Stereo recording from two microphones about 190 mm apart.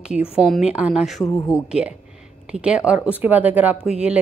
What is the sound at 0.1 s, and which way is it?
A woman's voice, 5° right (ahead or behind).